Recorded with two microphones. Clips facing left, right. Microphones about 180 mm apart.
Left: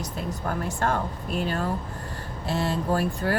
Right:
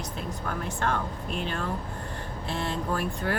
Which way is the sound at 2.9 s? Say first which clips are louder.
Left 4 dB; 40° left (ahead or behind).